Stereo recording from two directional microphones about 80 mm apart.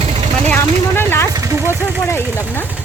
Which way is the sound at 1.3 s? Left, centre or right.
Right.